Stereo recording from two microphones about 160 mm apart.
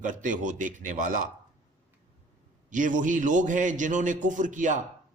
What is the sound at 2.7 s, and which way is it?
A man's voice, 55° right (ahead or behind).